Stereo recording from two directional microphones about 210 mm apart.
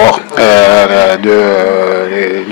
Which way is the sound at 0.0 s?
15° left (ahead or behind).